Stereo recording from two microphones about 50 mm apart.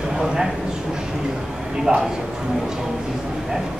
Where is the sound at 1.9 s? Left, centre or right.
Centre.